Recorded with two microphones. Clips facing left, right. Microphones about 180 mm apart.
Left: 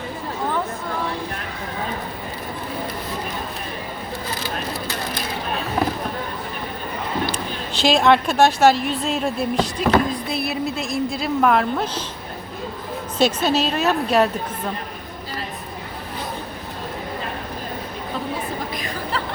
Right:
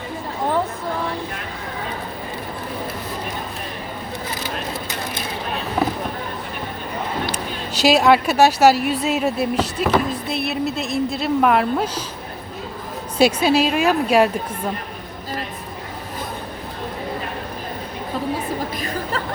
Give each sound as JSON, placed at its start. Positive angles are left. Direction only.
{"t": 7.3, "sound": "a sound", "side_deg": -40}
{"t": 7.9, "sound": "a woman's voice", "side_deg": -5}
{"t": 13.1, "sound": "a woman's voice", "side_deg": -10}